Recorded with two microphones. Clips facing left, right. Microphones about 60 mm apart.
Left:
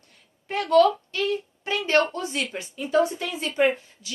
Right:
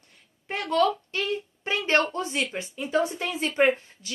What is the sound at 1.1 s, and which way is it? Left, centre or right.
A woman's voice, right.